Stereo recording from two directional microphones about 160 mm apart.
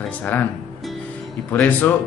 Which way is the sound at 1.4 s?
10° left (ahead or behind).